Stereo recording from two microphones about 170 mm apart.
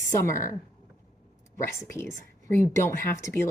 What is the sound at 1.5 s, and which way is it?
A woman's voice, 15° left (ahead or behind).